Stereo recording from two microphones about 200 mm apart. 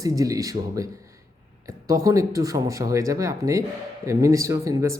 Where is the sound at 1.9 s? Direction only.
15° right (ahead or behind).